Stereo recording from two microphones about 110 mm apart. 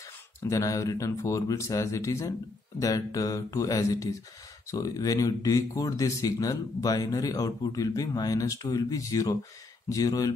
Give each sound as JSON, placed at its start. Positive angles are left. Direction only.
{"t": 0.4, "sound": "speech", "side_deg": 30}